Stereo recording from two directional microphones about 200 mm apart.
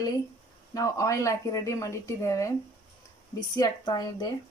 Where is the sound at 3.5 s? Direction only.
20° left (ahead or behind).